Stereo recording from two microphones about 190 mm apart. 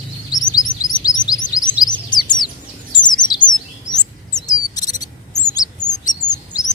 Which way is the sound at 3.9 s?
20° left (ahead or behind).